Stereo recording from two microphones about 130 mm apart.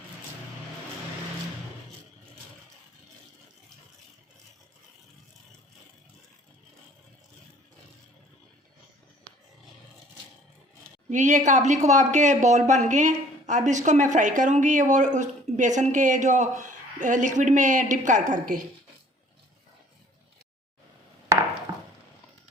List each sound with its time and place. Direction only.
11.1 s speech: 70° right (ahead or behind)